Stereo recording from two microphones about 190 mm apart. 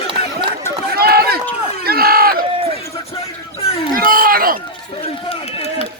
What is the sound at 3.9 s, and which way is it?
Speech, 50° right (ahead or behind).